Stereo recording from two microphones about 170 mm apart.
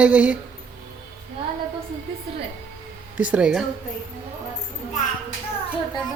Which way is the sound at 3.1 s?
10° right (ahead or behind).